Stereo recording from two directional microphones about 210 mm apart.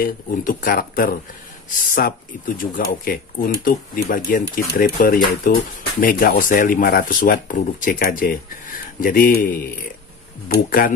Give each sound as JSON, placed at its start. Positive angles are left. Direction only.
{"t": 0.0, "sound": "speech", "side_deg": 40}